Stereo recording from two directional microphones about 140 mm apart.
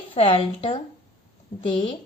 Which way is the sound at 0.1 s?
40° left (ahead or behind).